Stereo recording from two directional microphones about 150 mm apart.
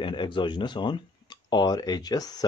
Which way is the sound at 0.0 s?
35° left (ahead or behind).